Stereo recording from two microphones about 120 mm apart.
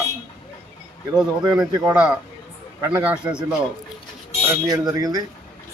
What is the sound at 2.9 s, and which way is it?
Speech, 10° right (ahead or behind).